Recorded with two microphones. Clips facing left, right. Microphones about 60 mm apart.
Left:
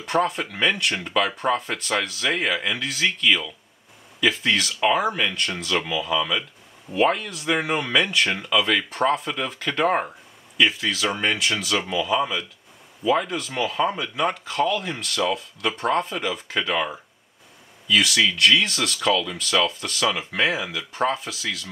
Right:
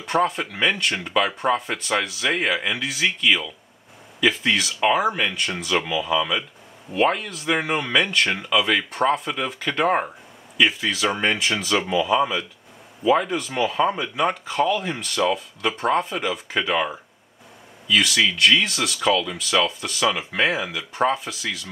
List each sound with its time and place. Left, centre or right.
0.0 s speech: centre